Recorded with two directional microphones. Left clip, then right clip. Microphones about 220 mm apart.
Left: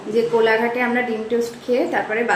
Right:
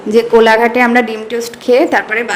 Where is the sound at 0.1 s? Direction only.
50° right (ahead or behind).